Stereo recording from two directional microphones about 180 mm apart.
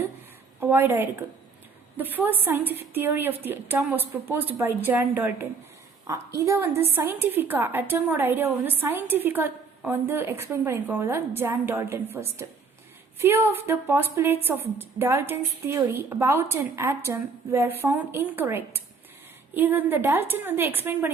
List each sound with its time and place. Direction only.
0.6 s a woman's voice: 10° right (ahead or behind)